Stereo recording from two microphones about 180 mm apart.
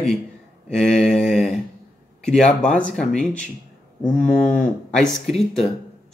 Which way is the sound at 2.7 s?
5° left (ahead or behind).